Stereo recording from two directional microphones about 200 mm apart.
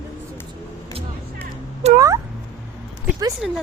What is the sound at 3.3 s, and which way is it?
Speech, centre (ahead or behind).